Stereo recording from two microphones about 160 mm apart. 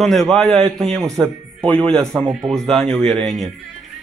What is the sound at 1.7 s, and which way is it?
A man's voice, 5° left (ahead or behind).